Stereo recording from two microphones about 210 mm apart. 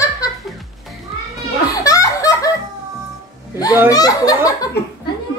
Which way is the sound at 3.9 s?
15° left (ahead or behind).